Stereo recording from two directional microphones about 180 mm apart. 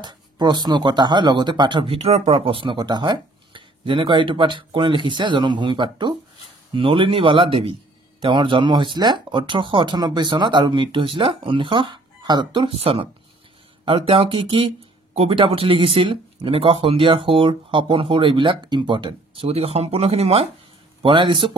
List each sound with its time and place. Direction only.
0.0 s speech: 25° right (ahead or behind)